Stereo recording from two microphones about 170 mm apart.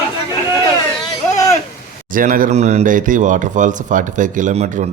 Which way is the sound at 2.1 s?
55° right (ahead or behind).